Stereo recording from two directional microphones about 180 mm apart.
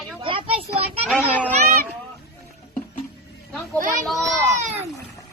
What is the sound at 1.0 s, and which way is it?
Speech, 5° right (ahead or behind).